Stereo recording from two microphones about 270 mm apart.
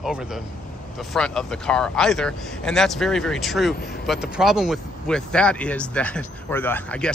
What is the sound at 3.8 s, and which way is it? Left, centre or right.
Speech, left.